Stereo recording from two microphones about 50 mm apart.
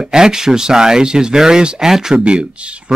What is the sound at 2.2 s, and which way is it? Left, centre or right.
Speech, right.